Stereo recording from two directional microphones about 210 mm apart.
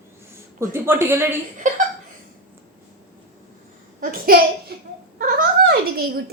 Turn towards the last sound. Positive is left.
turn(degrees=-45)  # may be behind; listen again after turning